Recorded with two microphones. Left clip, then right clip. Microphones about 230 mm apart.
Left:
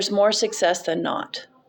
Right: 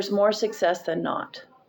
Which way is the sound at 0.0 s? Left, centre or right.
Left.